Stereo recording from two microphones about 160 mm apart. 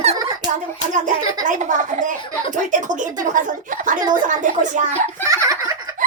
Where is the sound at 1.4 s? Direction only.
55° right (ahead or behind).